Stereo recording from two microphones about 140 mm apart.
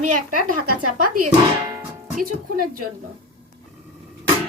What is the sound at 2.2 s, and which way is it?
Speech, 90° right.